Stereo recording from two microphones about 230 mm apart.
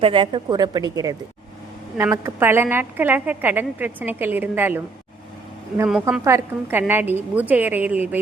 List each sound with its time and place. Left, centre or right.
0.0 s a woman's voice: right; by 8.2 s centre